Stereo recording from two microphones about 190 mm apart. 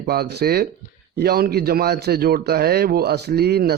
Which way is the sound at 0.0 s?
55° right (ahead or behind).